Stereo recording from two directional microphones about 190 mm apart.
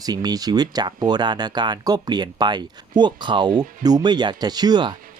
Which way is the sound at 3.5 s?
40° right (ahead or behind).